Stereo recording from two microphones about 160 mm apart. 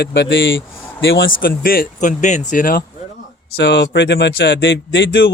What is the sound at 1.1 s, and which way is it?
Speech, 65° left (ahead or behind).